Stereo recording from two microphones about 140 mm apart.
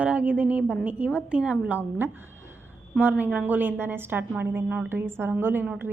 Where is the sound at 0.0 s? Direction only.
10° right (ahead or behind).